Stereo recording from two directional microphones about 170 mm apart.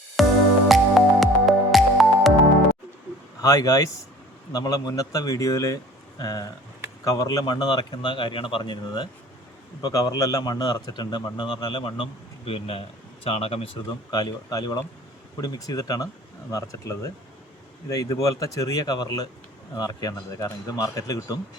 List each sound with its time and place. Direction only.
0.2 s music: centre (ahead or behind)
3.4 s a man's voice: 20° left (ahead or behind); by 13.7 s 35° left (ahead or behind)
14.1 s a man's voice: 25° left (ahead or behind)